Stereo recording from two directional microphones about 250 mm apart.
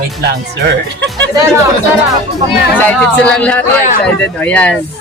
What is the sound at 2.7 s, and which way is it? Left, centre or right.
A man's voice, centre.